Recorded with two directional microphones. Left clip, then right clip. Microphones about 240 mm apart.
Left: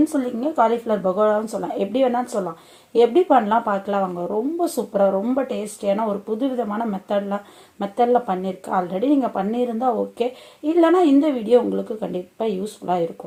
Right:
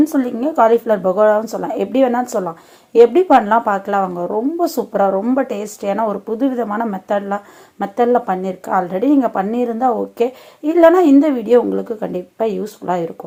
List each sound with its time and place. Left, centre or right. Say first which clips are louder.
0.0 s speech: right 5 dB; right